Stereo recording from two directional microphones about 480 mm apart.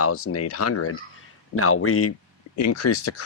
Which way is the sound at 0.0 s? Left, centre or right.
Left.